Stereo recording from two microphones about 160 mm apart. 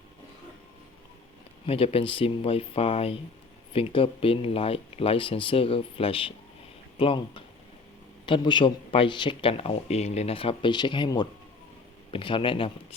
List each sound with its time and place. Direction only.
1.6 s speech: 35° left (ahead or behind)